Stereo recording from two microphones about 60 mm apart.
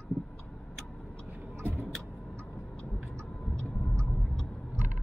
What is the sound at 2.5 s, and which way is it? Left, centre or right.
Vehicle, centre.